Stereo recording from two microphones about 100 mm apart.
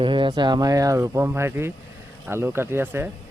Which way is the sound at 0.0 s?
55° right (ahead or behind).